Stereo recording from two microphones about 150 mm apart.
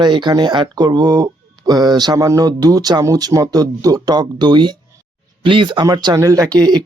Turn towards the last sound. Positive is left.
turn(degrees=-25)  # may be behind; listen again after turning